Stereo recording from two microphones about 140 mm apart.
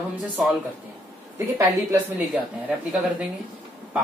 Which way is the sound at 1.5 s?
15° right (ahead or behind).